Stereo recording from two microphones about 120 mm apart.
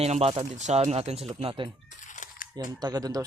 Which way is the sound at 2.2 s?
90° left.